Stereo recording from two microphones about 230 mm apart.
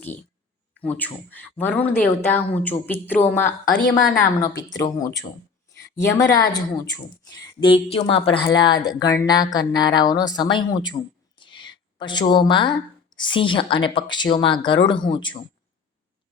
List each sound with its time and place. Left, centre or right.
0.8 s a woman's voice: centre
11.3 s a sound: left
13.1 s speech: left